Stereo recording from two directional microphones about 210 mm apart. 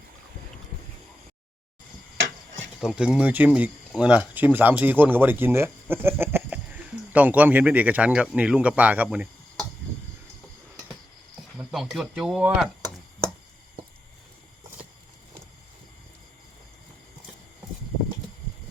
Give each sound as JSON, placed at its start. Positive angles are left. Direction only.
{"t": 2.1, "sound": "tick-tock", "side_deg": -65}
{"t": 2.8, "sound": "speech", "side_deg": -5}
{"t": 11.3, "sound": "speech", "side_deg": 0}